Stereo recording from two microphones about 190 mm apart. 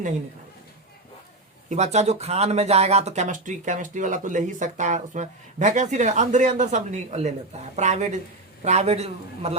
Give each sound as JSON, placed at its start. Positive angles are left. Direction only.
{"t": 1.7, "sound": "speech", "side_deg": -35}